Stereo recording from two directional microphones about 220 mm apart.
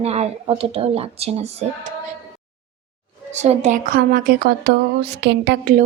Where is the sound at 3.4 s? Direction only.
30° right (ahead or behind); by 5.7 s 50° right (ahead or behind).